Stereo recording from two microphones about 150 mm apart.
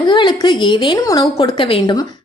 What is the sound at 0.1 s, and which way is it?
A woman's voice, 30° left (ahead or behind).